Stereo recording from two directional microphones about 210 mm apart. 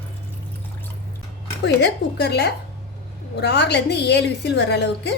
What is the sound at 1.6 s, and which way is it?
A woman's voice, 50° left (ahead or behind).